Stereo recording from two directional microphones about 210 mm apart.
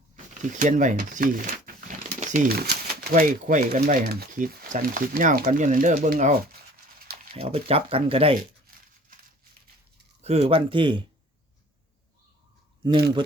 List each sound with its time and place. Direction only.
0.5 s speech: 35° right (ahead or behind)
7.3 s speech: 30° right (ahead or behind)
10.2 s speech: 30° right (ahead or behind)